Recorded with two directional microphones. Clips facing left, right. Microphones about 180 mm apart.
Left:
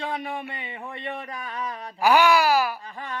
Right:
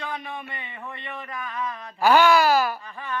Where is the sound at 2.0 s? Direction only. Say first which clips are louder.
Right 1 dB; 10° left (ahead or behind).